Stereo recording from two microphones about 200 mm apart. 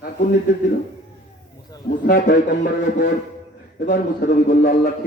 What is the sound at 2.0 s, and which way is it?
Speech, 55° left (ahead or behind).